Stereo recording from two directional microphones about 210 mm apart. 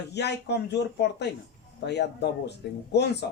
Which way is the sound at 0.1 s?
55° left (ahead or behind).